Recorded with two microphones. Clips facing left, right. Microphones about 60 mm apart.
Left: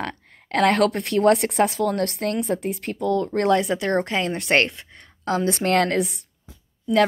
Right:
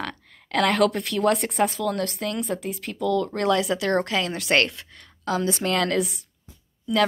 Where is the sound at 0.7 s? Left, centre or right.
Left.